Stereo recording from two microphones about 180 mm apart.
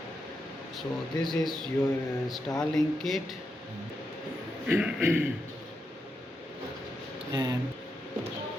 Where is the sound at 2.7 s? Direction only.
Centre (ahead or behind).